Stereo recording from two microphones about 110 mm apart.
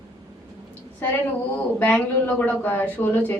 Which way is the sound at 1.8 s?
15° left (ahead or behind).